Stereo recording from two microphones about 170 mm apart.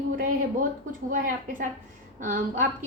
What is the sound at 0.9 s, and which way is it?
A woman's voice, 55° right (ahead or behind).